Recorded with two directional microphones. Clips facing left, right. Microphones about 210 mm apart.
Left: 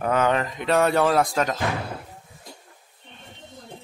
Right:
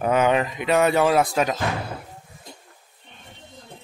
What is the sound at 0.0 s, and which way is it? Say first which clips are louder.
Speech: right 2 dB; 15° right (ahead or behind).